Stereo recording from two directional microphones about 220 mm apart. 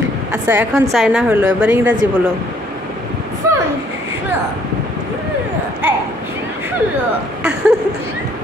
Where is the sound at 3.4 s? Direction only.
15° right (ahead or behind).